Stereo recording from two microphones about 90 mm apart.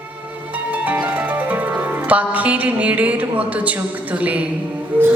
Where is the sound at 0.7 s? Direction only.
20° right (ahead or behind).